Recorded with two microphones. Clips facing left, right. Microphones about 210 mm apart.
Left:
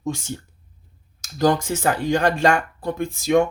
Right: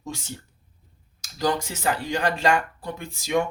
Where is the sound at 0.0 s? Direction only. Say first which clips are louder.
Left 8 dB; 50° left (ahead or behind).